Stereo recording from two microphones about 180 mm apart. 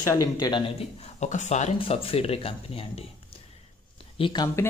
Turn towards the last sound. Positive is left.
turn(degrees=20)  # may be behind; listen again after turning